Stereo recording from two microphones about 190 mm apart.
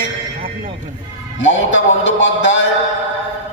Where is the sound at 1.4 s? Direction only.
75° left (ahead or behind).